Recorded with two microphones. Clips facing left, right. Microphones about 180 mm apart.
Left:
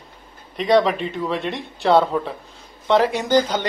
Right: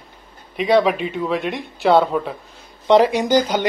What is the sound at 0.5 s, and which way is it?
Speech, 5° right (ahead or behind).